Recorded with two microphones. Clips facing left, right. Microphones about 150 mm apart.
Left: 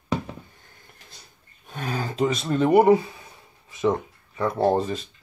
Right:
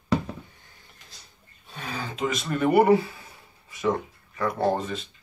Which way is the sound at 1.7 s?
45° left (ahead or behind).